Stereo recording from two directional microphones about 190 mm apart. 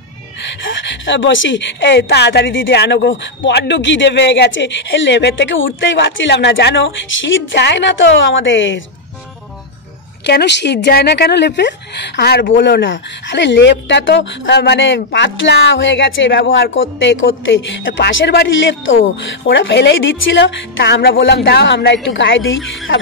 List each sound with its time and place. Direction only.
0.7 s a woman's voice: 75° left (ahead or behind)
10.2 s a woman's voice: 65° left (ahead or behind); by 22.6 s 80° left